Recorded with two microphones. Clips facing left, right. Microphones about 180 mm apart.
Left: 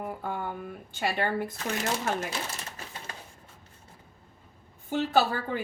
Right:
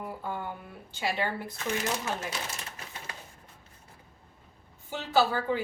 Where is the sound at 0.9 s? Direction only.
55° left (ahead or behind).